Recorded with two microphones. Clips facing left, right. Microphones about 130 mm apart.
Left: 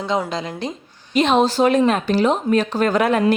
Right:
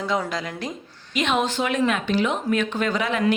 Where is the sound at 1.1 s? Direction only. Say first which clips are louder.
Left 7 dB; 35° left (ahead or behind).